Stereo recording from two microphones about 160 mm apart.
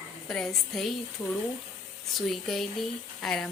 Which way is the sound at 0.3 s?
5° left (ahead or behind).